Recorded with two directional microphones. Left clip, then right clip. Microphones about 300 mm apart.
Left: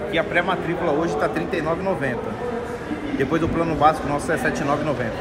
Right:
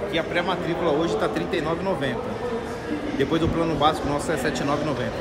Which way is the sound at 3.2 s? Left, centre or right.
Centre.